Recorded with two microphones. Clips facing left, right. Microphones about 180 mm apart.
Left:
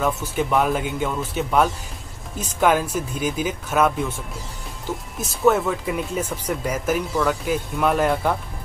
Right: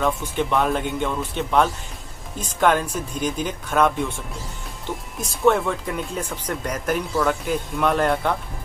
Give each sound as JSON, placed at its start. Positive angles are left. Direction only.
{"t": 0.0, "sound": "speech", "side_deg": 5}
{"t": 5.2, "sound": "speech", "side_deg": 5}